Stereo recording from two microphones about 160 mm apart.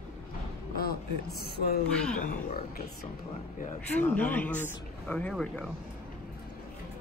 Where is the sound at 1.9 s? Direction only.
5° left (ahead or behind).